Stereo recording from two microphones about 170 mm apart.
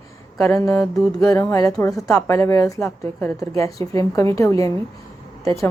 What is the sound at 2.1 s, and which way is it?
A woman's voice, 15° left (ahead or behind).